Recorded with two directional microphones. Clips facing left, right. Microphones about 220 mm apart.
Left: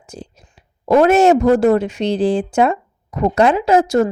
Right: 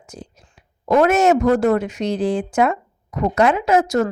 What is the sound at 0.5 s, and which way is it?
A woman's voice, 30° left (ahead or behind).